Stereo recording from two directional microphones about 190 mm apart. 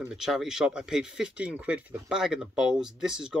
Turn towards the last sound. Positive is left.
turn(degrees=-5)  # may be behind; listen again after turning